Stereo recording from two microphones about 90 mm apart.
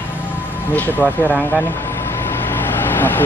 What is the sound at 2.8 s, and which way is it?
Vehicle, 25° left (ahead or behind).